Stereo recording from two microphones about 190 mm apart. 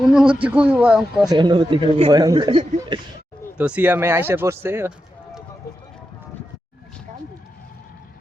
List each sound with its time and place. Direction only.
0.1 s speech: 5° right (ahead or behind)
1.3 s a man's voice: 25° right (ahead or behind)
3.6 s speech: 5° right (ahead or behind)